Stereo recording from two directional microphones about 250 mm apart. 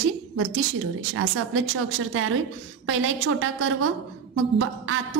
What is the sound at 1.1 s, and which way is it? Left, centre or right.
A woman's voice, right.